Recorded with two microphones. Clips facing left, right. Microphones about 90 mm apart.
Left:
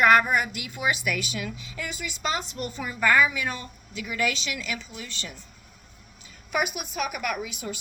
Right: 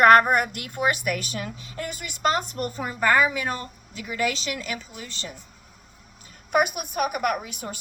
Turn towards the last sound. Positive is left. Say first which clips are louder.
# right 4 dB
turn(degrees=-45)  # may be behind; listen again after turning